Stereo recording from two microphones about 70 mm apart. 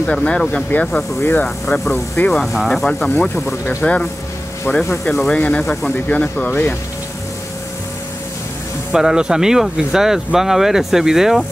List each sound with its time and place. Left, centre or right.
0.0 s a man's voice: centre
0.7 s speech: left
2.4 s speech: centre
3.6 s a man's voice: centre
5.1 s a man's voice: centre
5.9 s speech: centre
8.9 s speech: centre